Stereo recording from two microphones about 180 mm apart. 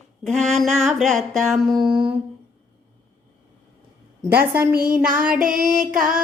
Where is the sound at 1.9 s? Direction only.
25° right (ahead or behind).